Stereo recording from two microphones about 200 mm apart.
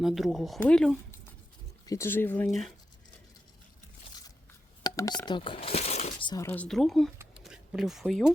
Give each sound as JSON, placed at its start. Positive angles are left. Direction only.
{"t": 0.0, "sound": "speech", "side_deg": 0}
{"t": 4.8, "sound": "speech", "side_deg": 20}
{"t": 7.2, "sound": "a sound", "side_deg": -5}